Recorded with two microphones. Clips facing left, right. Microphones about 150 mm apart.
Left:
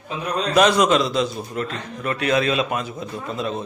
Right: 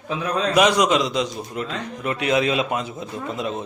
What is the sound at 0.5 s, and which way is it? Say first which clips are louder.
A man's voice: left 2 dB; 15° right (ahead or behind).